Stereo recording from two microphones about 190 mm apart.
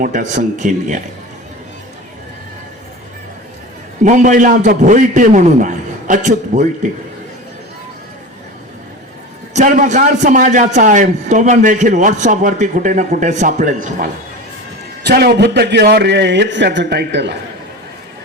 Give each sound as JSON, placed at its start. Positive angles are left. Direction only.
{"t": 0.0, "sound": "a man's voice", "side_deg": -40}
{"t": 4.0, "sound": "a man's voice", "side_deg": -40}
{"t": 9.5, "sound": "a man's voice", "side_deg": -40}
{"t": 15.0, "sound": "a man's voice", "side_deg": -60}